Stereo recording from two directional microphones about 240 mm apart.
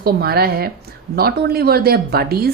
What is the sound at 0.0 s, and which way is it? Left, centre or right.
A woman's voice, right.